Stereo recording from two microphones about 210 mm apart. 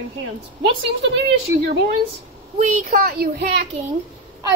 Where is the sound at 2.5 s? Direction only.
35° right (ahead or behind).